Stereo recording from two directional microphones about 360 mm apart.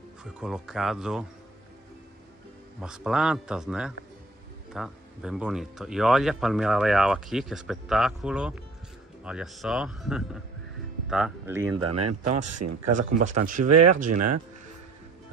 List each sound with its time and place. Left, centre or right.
0.2 s speech: centre
2.8 s speech: centre
11.8 s speech: right
12.9 s speech: right
13.7 s speech: right